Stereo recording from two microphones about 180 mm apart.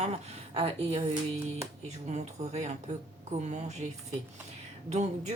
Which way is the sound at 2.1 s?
40° right (ahead or behind).